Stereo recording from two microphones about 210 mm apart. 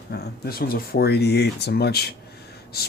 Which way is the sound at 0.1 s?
50° left (ahead or behind).